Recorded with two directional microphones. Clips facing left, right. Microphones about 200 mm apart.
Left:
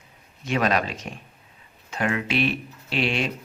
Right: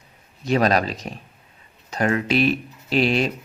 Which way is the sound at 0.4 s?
35° right (ahead or behind).